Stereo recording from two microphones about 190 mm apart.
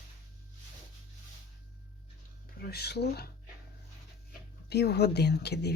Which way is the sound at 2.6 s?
55° left (ahead or behind).